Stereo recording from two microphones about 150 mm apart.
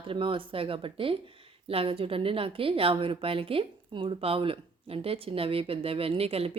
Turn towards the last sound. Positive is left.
turn(degrees=-40)  # may be behind; listen again after turning